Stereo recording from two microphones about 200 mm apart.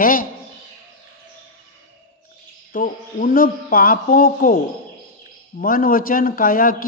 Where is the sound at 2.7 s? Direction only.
45° left (ahead or behind).